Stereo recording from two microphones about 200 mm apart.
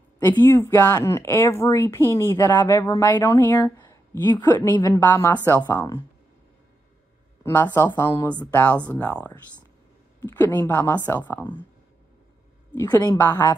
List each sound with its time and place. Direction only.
0.2 s speech: 10° left (ahead or behind)
7.4 s speech: 10° left (ahead or behind)
12.7 s speech: 10° left (ahead or behind)